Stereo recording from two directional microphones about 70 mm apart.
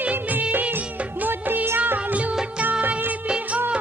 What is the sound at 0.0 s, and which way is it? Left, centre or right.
Music of bollywood, right.